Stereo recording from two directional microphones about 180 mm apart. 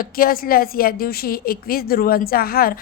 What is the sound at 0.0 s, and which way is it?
A woman's voice, 55° left (ahead or behind).